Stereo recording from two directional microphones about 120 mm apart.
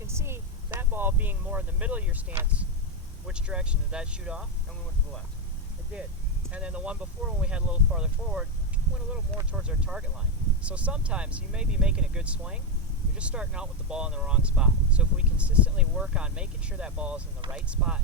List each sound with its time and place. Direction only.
0.1 s speech: 20° right (ahead or behind)
6.5 s speech: 10° right (ahead or behind)
9.5 s speech: 10° right (ahead or behind)